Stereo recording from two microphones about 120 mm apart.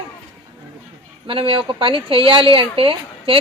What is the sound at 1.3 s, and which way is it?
A woman's voice, 50° right (ahead or behind).